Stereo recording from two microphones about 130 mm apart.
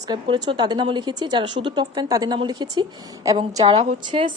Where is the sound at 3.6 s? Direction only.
55° right (ahead or behind).